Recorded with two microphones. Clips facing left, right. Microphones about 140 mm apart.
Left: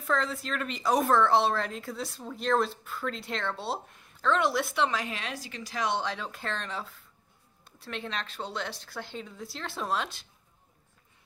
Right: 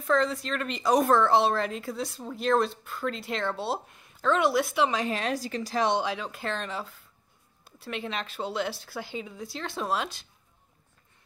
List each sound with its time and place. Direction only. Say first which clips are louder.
0.0 s speech: right 4 dB; centre (ahead or behind)
5.1 s speech: right 8 dB; 40° right (ahead or behind)
6.0 s speech: right 3 dB; 5° right (ahead or behind)